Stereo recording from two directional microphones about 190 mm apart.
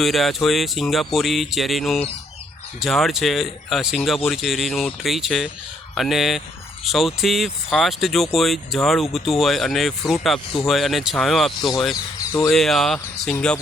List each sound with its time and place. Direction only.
0.0 s speech: centre (ahead or behind)